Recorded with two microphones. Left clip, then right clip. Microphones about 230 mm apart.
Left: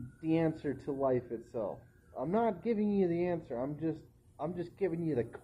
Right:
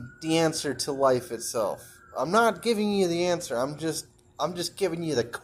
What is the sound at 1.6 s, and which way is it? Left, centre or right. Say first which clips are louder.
Speech: right 12 dB; right.